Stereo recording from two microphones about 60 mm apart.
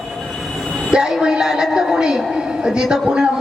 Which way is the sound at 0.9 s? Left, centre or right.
Centre.